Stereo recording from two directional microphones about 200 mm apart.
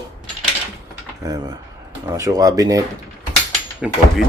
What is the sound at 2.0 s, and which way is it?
Speech, 15° right (ahead or behind).